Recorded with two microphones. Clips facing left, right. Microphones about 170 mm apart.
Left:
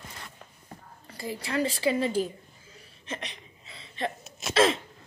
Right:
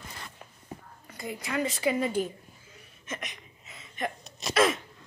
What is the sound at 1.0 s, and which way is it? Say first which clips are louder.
A woman's voice: left 2 dB; 30° left (ahead or behind).